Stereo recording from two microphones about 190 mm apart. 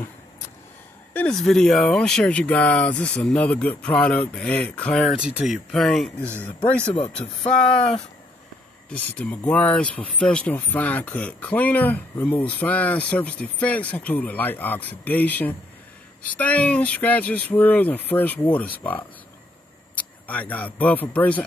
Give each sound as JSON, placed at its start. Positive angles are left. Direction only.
{"t": 1.1, "sound": "speech", "side_deg": 5}
{"t": 6.9, "sound": "speech", "side_deg": 30}
{"t": 8.9, "sound": "speech", "side_deg": 10}